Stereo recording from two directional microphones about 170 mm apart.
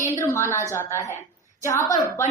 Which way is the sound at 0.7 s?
15° left (ahead or behind).